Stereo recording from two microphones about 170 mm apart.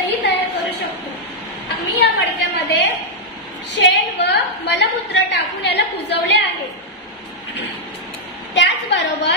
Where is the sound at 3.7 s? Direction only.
90° left.